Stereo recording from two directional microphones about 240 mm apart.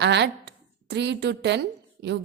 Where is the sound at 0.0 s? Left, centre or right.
Right.